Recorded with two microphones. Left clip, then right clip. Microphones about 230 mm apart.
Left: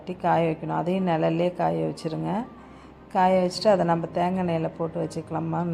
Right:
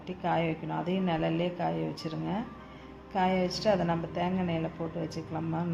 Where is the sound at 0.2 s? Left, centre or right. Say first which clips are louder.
Left 7 dB; left.